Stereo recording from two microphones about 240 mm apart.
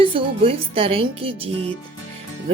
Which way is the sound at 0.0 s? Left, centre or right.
Right.